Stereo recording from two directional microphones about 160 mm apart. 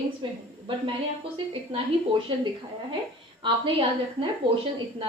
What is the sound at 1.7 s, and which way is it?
A woman's voice, 35° right (ahead or behind).